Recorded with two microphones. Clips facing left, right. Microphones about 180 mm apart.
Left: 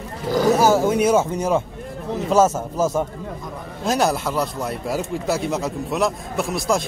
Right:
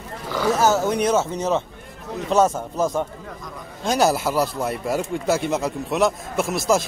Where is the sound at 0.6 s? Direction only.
10° left (ahead or behind).